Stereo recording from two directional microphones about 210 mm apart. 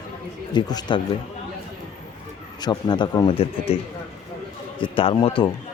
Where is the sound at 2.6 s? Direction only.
20° left (ahead or behind).